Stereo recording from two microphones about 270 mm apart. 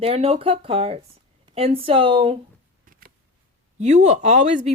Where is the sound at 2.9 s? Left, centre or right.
Right.